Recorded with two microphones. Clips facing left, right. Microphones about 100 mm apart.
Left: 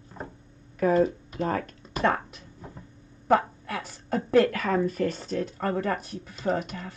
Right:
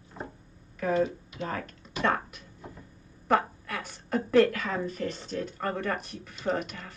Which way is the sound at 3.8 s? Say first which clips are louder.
Even; 35° left (ahead or behind).